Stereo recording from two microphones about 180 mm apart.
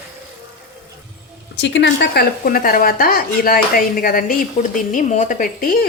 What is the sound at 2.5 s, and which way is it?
Speech, 50° left (ahead or behind).